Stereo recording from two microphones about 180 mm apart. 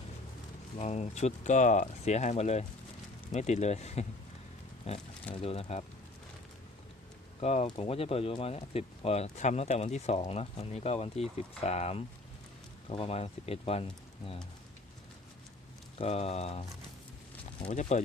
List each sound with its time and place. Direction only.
0.8 s speech: 40° left (ahead or behind)
7.4 s speech: 35° left (ahead or behind)
16.0 s speech: 35° left (ahead or behind)